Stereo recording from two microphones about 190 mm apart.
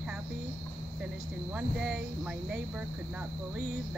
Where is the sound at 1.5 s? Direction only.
5° right (ahead or behind).